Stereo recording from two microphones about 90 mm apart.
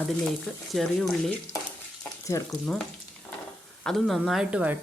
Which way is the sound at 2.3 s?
35° left (ahead or behind).